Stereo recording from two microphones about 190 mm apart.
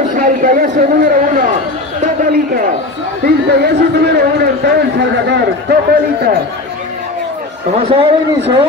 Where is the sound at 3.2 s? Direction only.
60° right (ahead or behind).